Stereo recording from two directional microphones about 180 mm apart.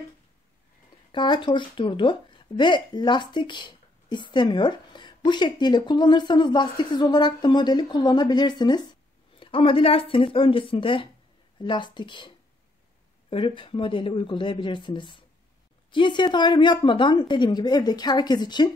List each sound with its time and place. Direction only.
1.1 s speech: 25° left (ahead or behind)